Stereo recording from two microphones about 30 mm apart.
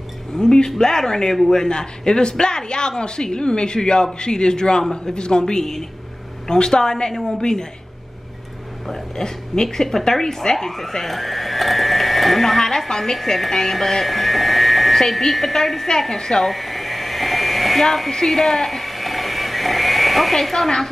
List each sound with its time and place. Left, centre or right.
0.4 s a man's voice: left
5.4 s a man's voice: centre
8.8 s a man's voice: centre
14.0 s a sound: centre
15.0 s speech: centre
16.2 s a man's voice: left
16.4 s a sound: centre
18.1 s speech: centre
18.8 s a sound: centre
20.4 s speech: centre